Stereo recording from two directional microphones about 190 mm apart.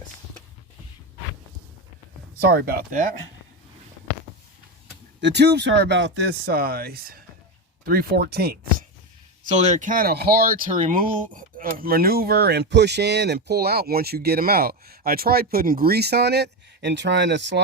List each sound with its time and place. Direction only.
2.4 s speech: 55° right (ahead or behind)
5.2 s speech: 65° right (ahead or behind)
9.5 s speech: 40° right (ahead or behind); by 17.6 s 70° right (ahead or behind)